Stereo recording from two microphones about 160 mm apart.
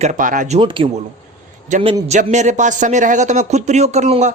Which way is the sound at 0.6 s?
30° right (ahead or behind).